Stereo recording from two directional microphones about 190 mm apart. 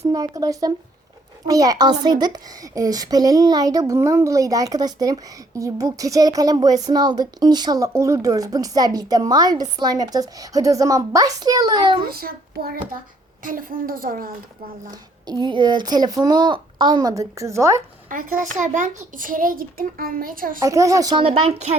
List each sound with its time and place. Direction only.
0.1 s a woman's voice: 20° right (ahead or behind)
12.0 s a child's voice: 50° right (ahead or behind)
14.8 s a woman's voice: 20° right (ahead or behind)
18.1 s a child's voice: 45° right (ahead or behind)
20.6 s speech: 15° right (ahead or behind)